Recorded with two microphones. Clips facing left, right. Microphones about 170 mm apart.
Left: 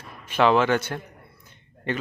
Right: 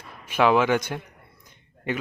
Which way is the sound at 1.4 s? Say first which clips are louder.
Left 1 dB; 10° right (ahead or behind).